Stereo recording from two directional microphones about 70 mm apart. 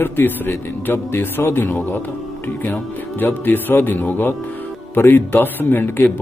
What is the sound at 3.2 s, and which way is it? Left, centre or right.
A man's voice, left.